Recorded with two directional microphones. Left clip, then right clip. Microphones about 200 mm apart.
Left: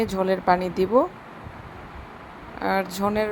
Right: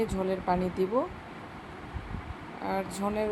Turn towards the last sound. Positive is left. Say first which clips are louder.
# left 7 dB
turn(degrees=25)  # may be behind; listen again after turning